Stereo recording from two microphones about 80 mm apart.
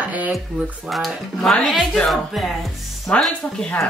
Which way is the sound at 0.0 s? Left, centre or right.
Centre.